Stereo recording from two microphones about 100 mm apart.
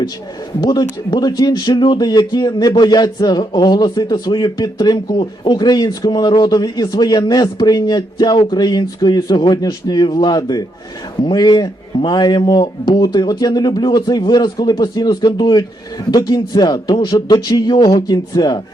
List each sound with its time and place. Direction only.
0.6 s speech: 45° left (ahead or behind)